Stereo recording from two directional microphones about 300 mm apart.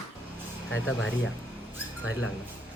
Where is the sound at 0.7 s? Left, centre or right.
Left.